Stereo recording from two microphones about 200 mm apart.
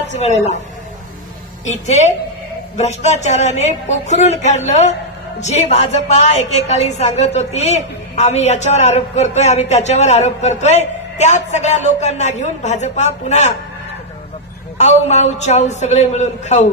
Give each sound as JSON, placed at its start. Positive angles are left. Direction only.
{"t": 0.1, "sound": "a woman's voice", "side_deg": 35}
{"t": 2.8, "sound": "a woman's voice", "side_deg": 35}
{"t": 14.8, "sound": "a woman's voice", "side_deg": 35}